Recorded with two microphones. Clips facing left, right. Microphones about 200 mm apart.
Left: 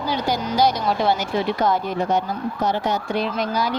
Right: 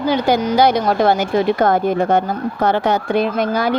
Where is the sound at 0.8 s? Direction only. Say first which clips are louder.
Right 5 dB; 50° right (ahead or behind).